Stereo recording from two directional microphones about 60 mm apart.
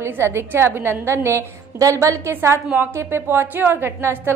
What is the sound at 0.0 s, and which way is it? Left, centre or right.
A woman's voice, right.